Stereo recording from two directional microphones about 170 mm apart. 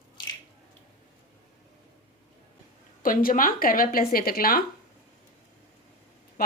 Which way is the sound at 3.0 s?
55° left (ahead or behind).